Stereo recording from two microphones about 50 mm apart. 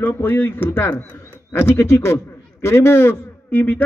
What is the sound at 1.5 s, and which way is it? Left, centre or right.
A man's voice, left.